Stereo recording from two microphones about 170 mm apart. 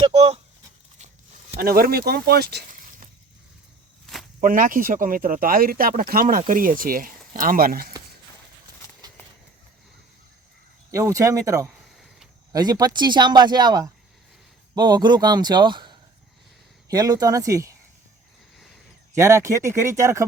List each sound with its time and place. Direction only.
0.0 s speech: 35° right (ahead or behind)
0.9 s a sound: 45° right (ahead or behind)
1.5 s speech: 60° right (ahead or behind)
4.0 s snake: centre (ahead or behind)
4.4 s speech: 55° right (ahead or behind)
10.9 s speech: 20° right (ahead or behind)
19.1 s speech: 15° right (ahead or behind)